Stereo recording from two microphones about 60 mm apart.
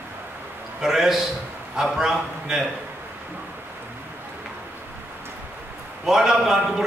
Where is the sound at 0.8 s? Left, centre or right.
Centre.